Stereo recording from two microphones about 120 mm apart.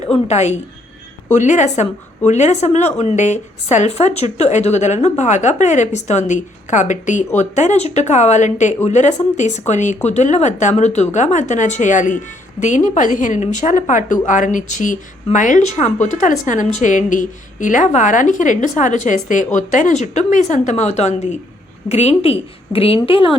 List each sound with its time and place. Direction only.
0.3 s a woman's voice: 70° left (ahead or behind)
1.3 s a woman's voice: 90° left
7.3 s speech: 80° left
10.1 s a woman's voice: 75° left (ahead or behind)
21.8 s a woman's voice: 65° left (ahead or behind); by 23.4 s 50° left (ahead or behind)